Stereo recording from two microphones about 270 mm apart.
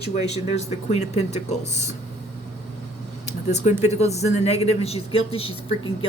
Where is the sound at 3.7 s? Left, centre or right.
Centre.